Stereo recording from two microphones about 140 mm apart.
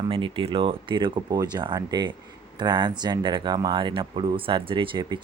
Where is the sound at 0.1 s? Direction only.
40° right (ahead or behind).